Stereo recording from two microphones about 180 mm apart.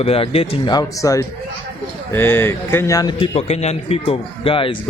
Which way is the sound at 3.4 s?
35° left (ahead or behind).